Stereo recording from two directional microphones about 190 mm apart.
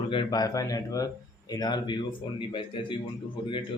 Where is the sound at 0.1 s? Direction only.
25° left (ahead or behind).